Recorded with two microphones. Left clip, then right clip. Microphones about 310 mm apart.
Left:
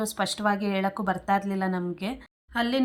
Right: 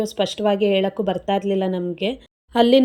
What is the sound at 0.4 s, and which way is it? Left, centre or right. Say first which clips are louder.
Speech: right 8 dB; centre.